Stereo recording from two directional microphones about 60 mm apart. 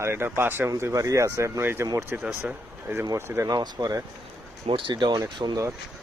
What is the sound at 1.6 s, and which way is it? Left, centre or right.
Speech, right.